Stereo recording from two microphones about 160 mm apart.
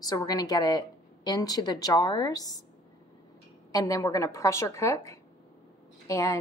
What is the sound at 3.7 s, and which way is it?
A woman's voice, 20° left (ahead or behind).